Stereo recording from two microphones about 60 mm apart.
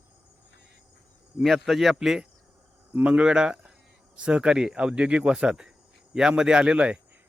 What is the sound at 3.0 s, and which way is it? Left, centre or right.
Speech, centre.